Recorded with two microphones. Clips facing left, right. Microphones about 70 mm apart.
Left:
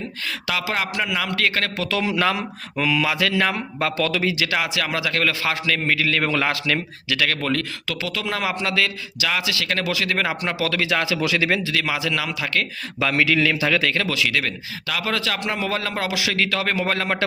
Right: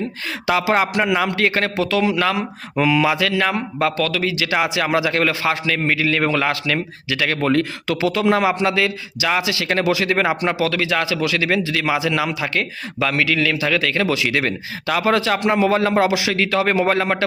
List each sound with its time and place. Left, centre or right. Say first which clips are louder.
0.4 s a man's voice: right 8 dB; right
1.7 s a man's voice: right 5 dB; centre
2.7 s a man's voice: right 5 dB; centre
3.2 s a man's voice: right 2 dB; centre
4.4 s a man's voice: right 4 dB; centre
7.3 s a man's voice: right 6 dB; centre
10.6 s a man's voice: right 3 dB; centre
13.0 s a man's voice: even; centre
14.3 s a man's voice: right 3 dB; right; by 17.2 s centre